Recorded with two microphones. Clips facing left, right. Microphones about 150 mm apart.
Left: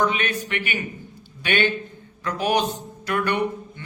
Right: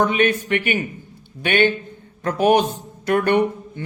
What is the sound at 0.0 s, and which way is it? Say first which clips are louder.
A man's voice: right 5 dB; 50° right (ahead or behind).